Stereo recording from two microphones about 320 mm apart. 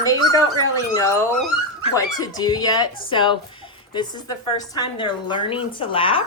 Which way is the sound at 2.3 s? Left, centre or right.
Centre.